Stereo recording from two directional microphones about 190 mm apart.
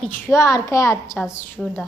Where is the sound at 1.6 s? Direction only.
5° right (ahead or behind).